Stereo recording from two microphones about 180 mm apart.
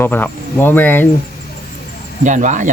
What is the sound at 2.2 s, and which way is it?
Speech, 45° right (ahead or behind).